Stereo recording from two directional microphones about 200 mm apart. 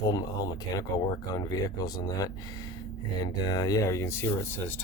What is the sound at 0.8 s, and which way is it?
Speech, 15° left (ahead or behind).